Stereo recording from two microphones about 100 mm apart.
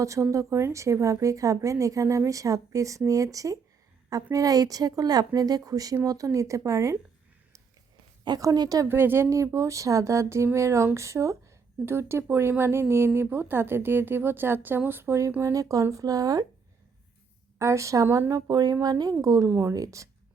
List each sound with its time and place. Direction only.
0.0 s a woman's voice: 30° right (ahead or behind)
8.4 s a woman's voice: 40° right (ahead or behind)
8.9 s speech: 20° right (ahead or behind); by 16.5 s 40° right (ahead or behind)
17.6 s a woman's voice: 30° right (ahead or behind)
19.5 s a woman's voice: 25° right (ahead or behind)